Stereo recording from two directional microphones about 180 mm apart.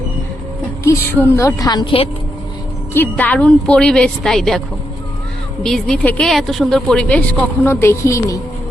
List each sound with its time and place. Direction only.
0.9 s a woman's voice: 15° left (ahead or behind)
2.9 s a woman's voice: 10° left (ahead or behind)
5.6 s a woman's voice: 5° left (ahead or behind)